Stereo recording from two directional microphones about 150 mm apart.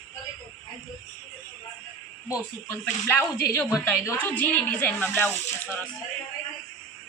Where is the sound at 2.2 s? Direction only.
20° left (ahead or behind).